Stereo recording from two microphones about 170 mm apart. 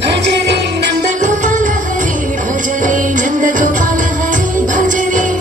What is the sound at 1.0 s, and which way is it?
Music, 45° right (ahead or behind).